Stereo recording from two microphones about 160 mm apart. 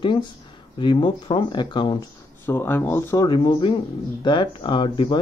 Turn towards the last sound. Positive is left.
turn(degrees=30)  # may be behind; listen again after turning